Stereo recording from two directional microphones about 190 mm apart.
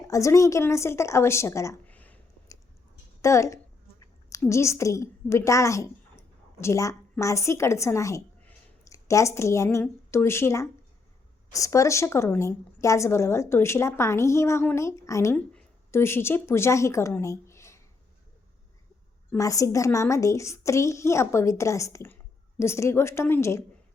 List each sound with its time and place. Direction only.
0.1 s a woman's voice: 15° left (ahead or behind)
19.3 s a woman's voice: 15° left (ahead or behind)